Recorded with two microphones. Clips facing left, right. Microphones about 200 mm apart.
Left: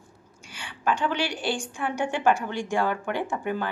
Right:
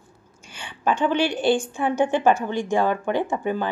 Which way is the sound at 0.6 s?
20° right (ahead or behind).